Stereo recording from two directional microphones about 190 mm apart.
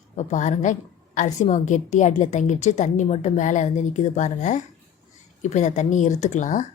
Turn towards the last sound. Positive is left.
turn(degrees=40)  # may be behind; listen again after turning